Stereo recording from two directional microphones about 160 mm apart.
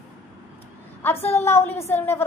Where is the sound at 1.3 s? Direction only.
15° left (ahead or behind).